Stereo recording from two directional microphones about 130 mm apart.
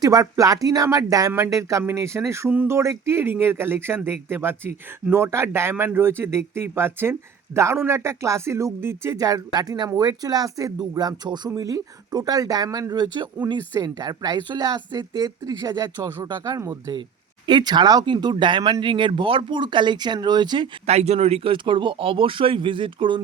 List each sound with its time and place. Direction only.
0.0 s speech: 25° right (ahead or behind)
16.4 s speech: 25° right (ahead or behind)
17.4 s speech: 35° right (ahead or behind)
20.8 s speech: 55° right (ahead or behind); by 23.2 s 40° right (ahead or behind)